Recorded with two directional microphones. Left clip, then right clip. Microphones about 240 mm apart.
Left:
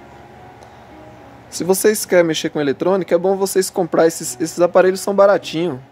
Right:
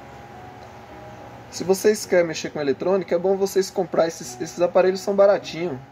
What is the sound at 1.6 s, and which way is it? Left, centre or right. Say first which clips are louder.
Speech: left 4 dB; left.